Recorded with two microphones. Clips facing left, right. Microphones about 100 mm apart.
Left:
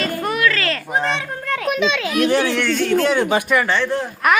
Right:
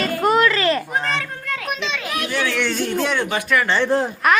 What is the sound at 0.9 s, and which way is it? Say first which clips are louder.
Speech: left 2 dB; 25° left (ahead or behind).